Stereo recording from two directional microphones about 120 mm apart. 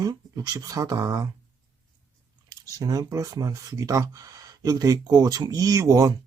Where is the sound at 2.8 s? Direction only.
30° right (ahead or behind).